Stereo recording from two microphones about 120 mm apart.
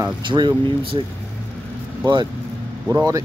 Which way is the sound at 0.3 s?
20° right (ahead or behind).